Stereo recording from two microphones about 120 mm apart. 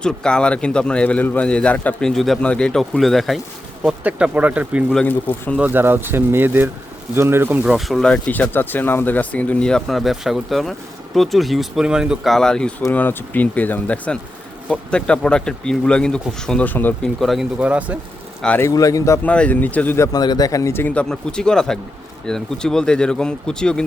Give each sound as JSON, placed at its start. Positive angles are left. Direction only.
{"t": 0.0, "sound": "a man's voice", "side_deg": 5}
{"t": 3.8, "sound": "speech", "side_deg": -10}
{"t": 7.7, "sound": "a man's voice", "side_deg": 0}
{"t": 17.2, "sound": "speech", "side_deg": 0}
{"t": 17.6, "sound": "speech", "side_deg": -10}
{"t": 18.6, "sound": "speech", "side_deg": 30}
{"t": 19.2, "sound": "a man's voice", "side_deg": 10}
{"t": 20.1, "sound": "a man's voice", "side_deg": 35}